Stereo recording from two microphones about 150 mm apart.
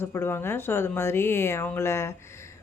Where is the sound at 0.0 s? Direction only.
15° left (ahead or behind).